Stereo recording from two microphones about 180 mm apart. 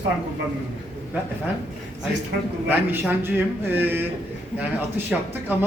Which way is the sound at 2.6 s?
10° right (ahead or behind).